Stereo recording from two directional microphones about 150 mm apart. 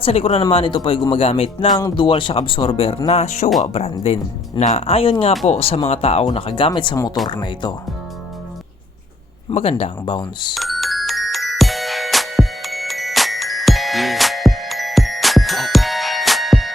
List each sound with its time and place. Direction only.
0.0 s speech: 40° left (ahead or behind)
9.5 s speech: 40° left (ahead or behind)
10.5 s music: centre (ahead or behind)